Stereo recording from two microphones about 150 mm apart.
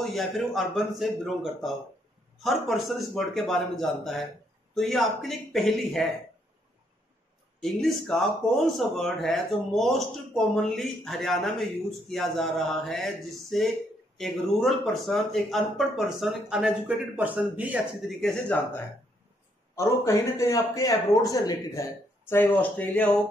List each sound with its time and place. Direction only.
0.0 s speech: centre (ahead or behind)
7.6 s speech: centre (ahead or behind)
18.2 s speech: 5° left (ahead or behind)
19.7 s a man's voice: 20° left (ahead or behind)